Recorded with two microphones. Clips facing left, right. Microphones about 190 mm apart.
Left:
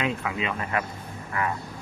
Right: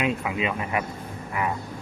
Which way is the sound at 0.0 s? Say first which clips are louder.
Right 2 dB; 20° right (ahead or behind).